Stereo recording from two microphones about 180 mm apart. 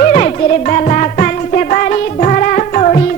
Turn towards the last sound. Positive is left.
turn(degrees=40)  # may be behind; listen again after turning